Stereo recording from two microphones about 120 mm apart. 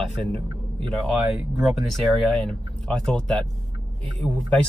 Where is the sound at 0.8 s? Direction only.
Centre (ahead or behind).